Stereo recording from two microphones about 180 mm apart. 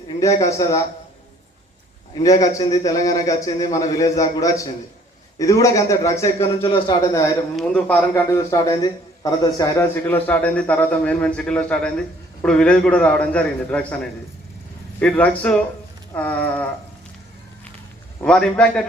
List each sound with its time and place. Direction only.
0.2 s a man's voice: 15° left (ahead or behind)
2.2 s a man's voice: 20° left (ahead or behind)
6.7 s a man's voice: 25° left (ahead or behind)
7.5 s a man's voice: 5° left (ahead or behind)
8.1 s a man's voice: 15° left (ahead or behind)
9.9 s a man's voice: 10° left (ahead or behind)
18.2 s a man's voice: 5° left (ahead or behind)